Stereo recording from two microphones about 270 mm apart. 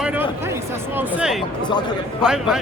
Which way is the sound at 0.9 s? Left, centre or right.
Centre.